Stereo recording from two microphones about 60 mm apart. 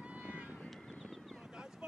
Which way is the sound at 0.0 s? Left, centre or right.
Right.